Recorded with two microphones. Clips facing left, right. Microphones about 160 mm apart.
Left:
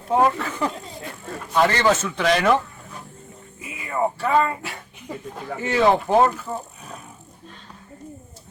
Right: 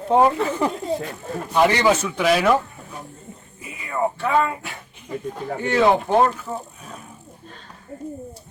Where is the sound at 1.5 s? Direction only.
10° right (ahead or behind).